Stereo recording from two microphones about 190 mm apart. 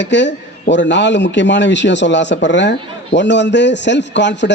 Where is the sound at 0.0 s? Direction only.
70° left (ahead or behind).